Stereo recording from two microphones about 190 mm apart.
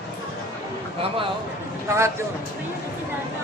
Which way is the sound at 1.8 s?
15° right (ahead or behind).